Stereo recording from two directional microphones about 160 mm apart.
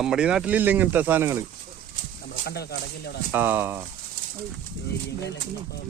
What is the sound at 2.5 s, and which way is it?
Speech, 90° left.